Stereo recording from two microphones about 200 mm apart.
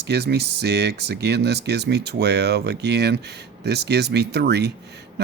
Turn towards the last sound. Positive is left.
turn(degrees=-55)  # may be behind; listen again after turning